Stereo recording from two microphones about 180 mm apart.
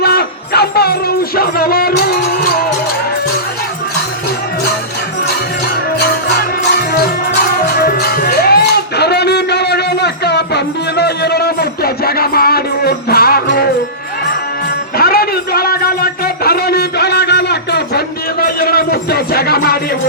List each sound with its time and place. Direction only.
0.0 s music: 65° left (ahead or behind)
6.0 s music: 65° left (ahead or behind)
14.9 s a sound: 55° left (ahead or behind)